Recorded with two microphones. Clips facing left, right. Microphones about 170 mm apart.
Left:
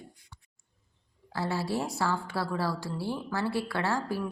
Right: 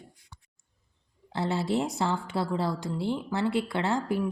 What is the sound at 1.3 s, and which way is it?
A woman's voice, 20° right (ahead or behind).